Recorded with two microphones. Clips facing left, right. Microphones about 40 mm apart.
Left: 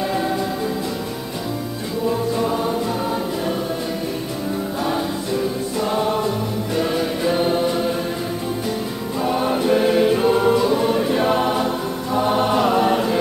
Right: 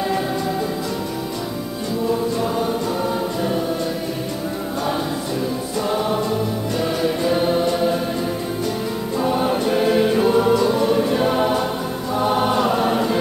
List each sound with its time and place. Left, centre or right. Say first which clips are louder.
5.8 s music: even; centre
9.2 s choir: even; centre